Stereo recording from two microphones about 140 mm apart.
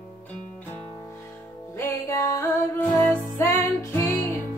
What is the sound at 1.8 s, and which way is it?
Music, 20° left (ahead or behind).